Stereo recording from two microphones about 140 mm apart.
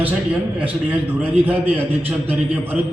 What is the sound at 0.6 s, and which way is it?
A man's voice, 10° right (ahead or behind).